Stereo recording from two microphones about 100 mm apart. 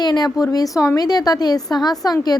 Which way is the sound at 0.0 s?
45° left (ahead or behind).